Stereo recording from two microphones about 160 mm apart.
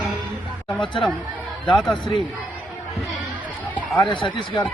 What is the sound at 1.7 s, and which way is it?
Mantra, 5° left (ahead or behind).